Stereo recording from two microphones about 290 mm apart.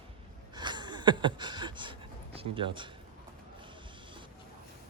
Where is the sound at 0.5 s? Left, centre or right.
Centre.